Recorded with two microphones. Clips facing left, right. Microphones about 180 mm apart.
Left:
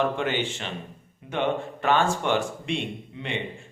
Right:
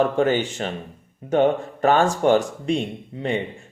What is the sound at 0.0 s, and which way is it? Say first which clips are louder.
Speech: right 6 dB; 40° right (ahead or behind).